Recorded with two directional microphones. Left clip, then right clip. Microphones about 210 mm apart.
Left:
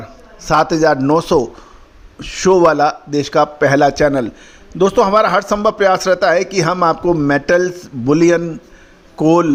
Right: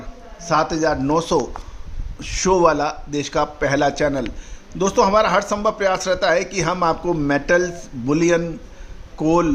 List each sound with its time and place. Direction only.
0.3 s a man's voice: 35° left (ahead or behind)